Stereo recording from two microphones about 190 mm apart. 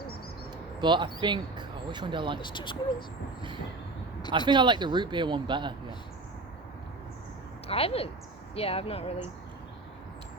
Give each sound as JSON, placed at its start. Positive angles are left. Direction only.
{"t": 0.8, "sound": "speech", "side_deg": -25}
{"t": 2.4, "sound": "speech", "side_deg": 25}
{"t": 4.3, "sound": "speech", "side_deg": -25}
{"t": 7.7, "sound": "speech", "side_deg": 30}